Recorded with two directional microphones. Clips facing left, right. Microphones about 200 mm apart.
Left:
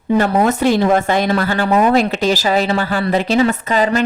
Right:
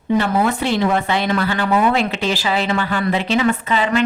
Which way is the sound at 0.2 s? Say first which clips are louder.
Left 7 dB; 40° left (ahead or behind).